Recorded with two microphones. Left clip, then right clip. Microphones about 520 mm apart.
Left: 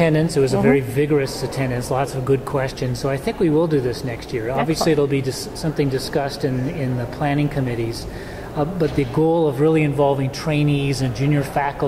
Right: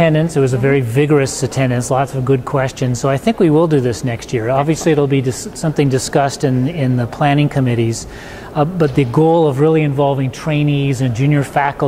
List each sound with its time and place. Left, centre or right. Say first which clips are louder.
0.0 s speech: right 4 dB; right